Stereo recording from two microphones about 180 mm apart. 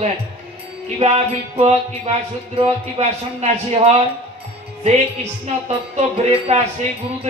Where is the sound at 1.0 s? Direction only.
35° right (ahead or behind).